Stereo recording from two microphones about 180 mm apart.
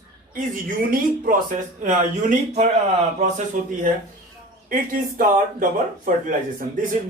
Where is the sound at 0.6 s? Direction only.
50° right (ahead or behind).